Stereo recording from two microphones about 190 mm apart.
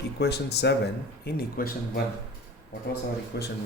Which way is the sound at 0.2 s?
60° left (ahead or behind).